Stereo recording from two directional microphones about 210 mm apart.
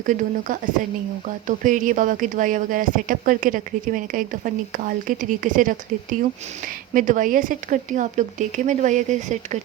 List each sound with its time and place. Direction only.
0.0 s speech: 40° right (ahead or behind)